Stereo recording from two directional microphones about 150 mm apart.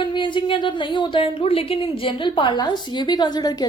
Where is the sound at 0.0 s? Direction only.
30° left (ahead or behind).